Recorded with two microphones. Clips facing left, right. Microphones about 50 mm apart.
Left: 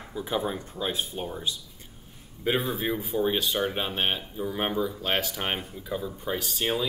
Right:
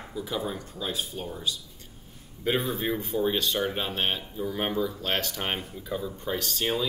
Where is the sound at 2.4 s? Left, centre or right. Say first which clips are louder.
Even; centre.